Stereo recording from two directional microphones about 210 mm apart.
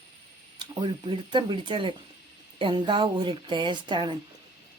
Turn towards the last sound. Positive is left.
turn(degrees=-20)  # may be behind; listen again after turning